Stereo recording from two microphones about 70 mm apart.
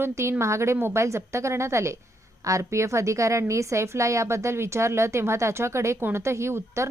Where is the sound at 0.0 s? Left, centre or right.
Right.